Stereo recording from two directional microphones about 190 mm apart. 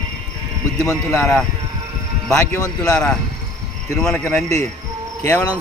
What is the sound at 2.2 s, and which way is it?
Speech, 15° left (ahead or behind).